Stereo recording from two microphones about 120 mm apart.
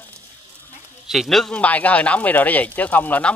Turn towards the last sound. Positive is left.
turn(degrees=15)  # may be behind; listen again after turning